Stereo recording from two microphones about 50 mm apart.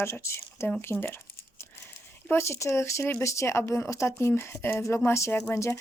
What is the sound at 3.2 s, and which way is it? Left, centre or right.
A woman's voice, left.